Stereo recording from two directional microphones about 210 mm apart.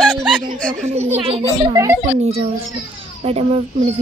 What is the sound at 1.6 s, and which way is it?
Speech, 15° right (ahead or behind).